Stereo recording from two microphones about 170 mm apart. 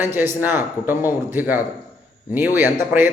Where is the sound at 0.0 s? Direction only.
10° right (ahead or behind).